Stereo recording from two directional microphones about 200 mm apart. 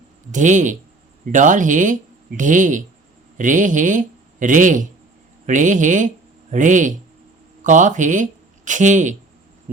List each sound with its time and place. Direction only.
0.3 s speech: 40° right (ahead or behind)
9.7 s heart sounds: 40° right (ahead or behind)